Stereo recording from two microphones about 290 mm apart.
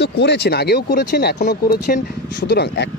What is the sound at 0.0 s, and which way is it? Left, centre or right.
Speech, left.